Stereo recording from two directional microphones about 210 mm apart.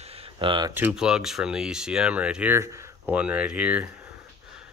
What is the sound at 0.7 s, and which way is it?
Speech, 5° right (ahead or behind).